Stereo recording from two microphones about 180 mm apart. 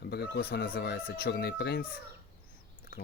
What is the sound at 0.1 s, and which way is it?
Speech, 60° left (ahead or behind).